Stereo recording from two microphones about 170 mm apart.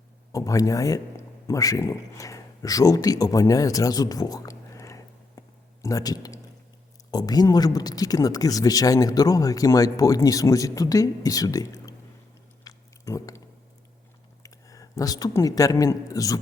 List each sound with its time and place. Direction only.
0.3 s speech: 20° left (ahead or behind)
12.6 s a sound: 20° left (ahead or behind)
14.4 s speech: 20° left (ahead or behind)